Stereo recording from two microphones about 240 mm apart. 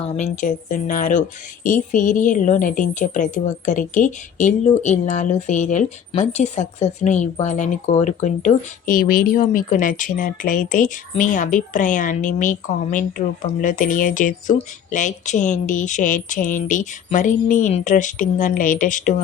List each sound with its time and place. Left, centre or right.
0.0 s a woman's voice: left